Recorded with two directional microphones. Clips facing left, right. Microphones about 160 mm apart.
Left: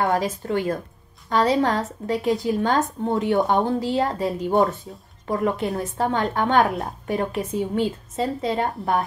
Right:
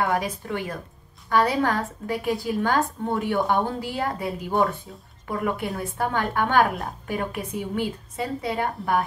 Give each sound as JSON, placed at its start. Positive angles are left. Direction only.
{"t": 0.0, "sound": "a woman's voice", "side_deg": 30}